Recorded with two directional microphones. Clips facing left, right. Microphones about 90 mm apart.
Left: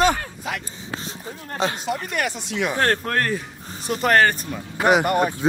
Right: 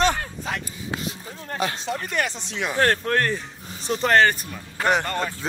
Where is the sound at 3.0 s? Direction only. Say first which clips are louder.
Right 1 dB; 40° left (ahead or behind).